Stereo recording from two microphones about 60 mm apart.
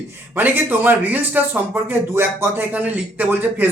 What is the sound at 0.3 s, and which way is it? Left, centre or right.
Speech, right.